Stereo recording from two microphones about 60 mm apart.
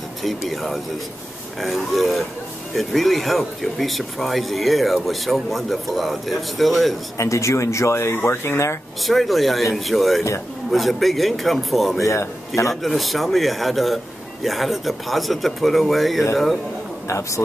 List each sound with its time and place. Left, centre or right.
0.5 s speech: centre
7.2 s speech: left
9.0 s speech: centre
12.0 s a man's voice: left
12.6 s speech: centre